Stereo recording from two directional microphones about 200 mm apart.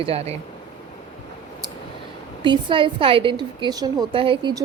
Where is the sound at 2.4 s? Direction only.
25° right (ahead or behind).